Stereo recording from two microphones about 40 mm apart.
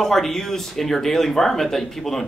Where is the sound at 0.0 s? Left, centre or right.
Centre.